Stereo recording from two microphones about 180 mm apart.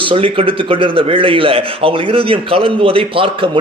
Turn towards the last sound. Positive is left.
turn(degrees=-30)  # may be behind; listen again after turning